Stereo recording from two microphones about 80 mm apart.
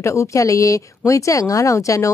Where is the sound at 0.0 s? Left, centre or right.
Left.